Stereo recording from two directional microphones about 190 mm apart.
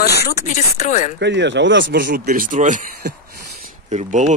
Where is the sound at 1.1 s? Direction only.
65° right (ahead or behind).